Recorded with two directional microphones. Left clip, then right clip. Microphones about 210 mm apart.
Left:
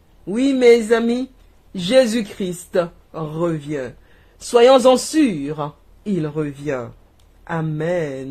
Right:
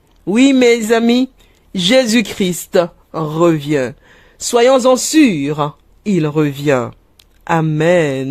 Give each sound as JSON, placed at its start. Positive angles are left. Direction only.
{"t": 0.3, "sound": "speech", "side_deg": -40}
{"t": 4.4, "sound": "speech", "side_deg": -35}